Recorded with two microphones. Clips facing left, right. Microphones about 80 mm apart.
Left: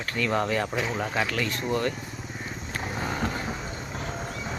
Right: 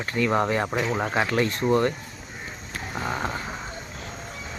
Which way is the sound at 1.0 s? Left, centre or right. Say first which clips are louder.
Right 6 dB; right.